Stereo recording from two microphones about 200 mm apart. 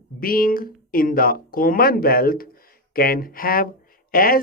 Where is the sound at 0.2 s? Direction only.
45° left (ahead or behind).